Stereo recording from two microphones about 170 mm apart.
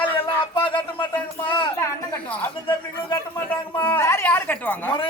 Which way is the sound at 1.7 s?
15° left (ahead or behind).